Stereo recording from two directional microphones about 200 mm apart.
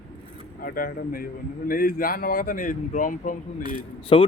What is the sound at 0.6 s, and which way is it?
A man's voice, 45° left (ahead or behind).